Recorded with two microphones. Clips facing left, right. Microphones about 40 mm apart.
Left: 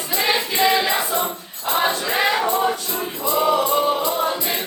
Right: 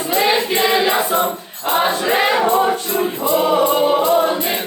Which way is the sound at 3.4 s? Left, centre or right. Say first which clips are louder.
Right 2 dB; right.